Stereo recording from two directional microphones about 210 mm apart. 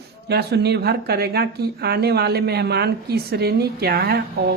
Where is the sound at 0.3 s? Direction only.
50° right (ahead or behind).